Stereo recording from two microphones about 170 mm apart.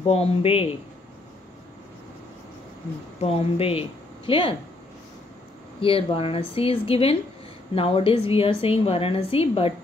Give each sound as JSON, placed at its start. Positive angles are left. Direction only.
{"t": 0.1, "sound": "a woman's voice", "side_deg": 35}
{"t": 3.2, "sound": "a woman's voice", "side_deg": 35}
{"t": 5.8, "sound": "a woman's voice", "side_deg": 30}